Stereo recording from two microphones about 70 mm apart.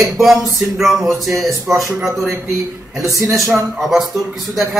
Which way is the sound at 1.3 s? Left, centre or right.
Right.